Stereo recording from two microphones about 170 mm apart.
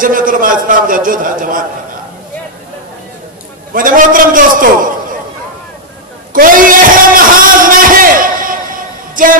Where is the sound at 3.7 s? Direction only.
55° right (ahead or behind).